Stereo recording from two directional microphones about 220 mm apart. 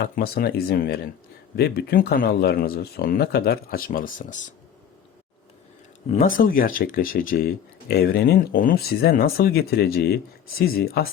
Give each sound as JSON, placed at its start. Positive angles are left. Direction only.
{"t": 0.0, "sound": "speech", "side_deg": 40}
{"t": 6.1, "sound": "speech", "side_deg": 35}